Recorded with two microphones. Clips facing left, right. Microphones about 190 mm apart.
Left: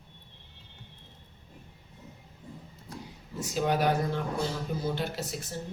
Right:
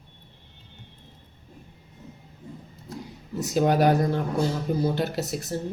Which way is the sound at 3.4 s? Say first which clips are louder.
Right 6 dB; 40° right (ahead or behind).